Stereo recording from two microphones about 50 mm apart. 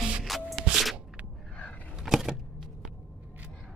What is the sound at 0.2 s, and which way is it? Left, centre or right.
Music, centre.